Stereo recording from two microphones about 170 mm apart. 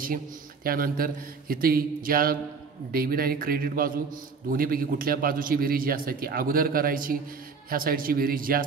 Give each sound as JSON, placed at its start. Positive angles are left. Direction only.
{"t": 0.7, "sound": "a man's voice", "side_deg": -60}